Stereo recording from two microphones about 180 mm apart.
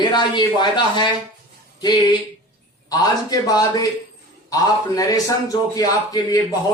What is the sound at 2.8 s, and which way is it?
A man's voice, 20° left (ahead or behind).